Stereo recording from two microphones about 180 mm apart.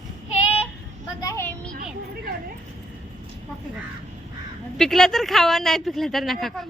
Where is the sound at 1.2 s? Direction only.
15° left (ahead or behind).